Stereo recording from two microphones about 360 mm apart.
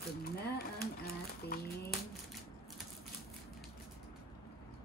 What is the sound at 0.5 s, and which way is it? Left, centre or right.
Speech, left.